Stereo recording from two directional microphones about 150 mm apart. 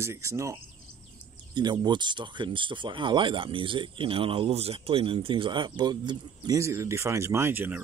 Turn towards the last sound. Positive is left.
turn(degrees=-15)  # may be behind; listen again after turning